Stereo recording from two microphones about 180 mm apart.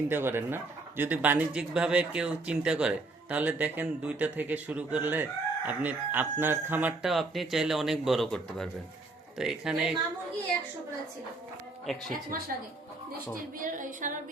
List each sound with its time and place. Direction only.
0.1 s a woman's voice: 10° right (ahead or behind)
12.1 s music: 50° right (ahead or behind)
13.6 s music: 45° right (ahead or behind)